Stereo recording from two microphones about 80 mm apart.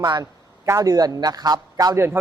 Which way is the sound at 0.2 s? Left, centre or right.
Right.